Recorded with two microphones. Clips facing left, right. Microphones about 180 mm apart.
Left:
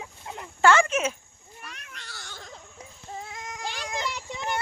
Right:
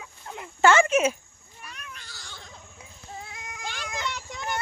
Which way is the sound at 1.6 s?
70° left (ahead or behind).